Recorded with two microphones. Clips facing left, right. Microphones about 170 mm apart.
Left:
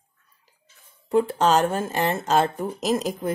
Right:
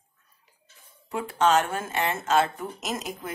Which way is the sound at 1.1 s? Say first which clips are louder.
Left 4 dB; 35° left (ahead or behind).